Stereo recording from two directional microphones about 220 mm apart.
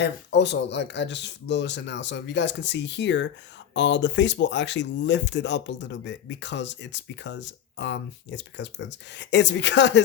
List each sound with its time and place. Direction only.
0.0 s speech: 50° left (ahead or behind)